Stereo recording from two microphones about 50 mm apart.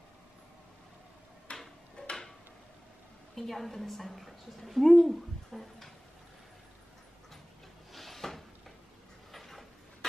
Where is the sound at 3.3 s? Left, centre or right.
Centre.